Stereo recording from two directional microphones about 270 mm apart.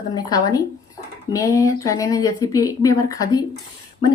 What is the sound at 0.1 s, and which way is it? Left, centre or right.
Speech, centre.